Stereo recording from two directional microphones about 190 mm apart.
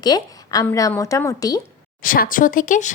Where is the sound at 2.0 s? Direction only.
45° left (ahead or behind).